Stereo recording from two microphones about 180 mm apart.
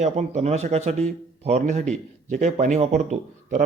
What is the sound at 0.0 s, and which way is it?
A man's voice, 40° right (ahead or behind).